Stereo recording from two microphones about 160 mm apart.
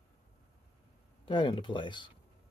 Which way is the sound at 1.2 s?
35° left (ahead or behind).